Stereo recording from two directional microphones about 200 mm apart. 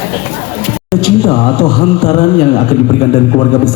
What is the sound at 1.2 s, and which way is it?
Speech, 25° left (ahead or behind).